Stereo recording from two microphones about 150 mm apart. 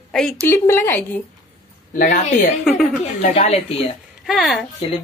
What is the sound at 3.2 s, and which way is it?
Speech, 50° left (ahead or behind).